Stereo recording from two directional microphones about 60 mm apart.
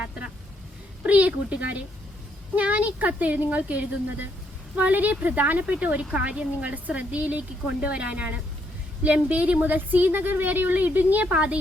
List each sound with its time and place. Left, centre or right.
1.0 s a woman's voice: right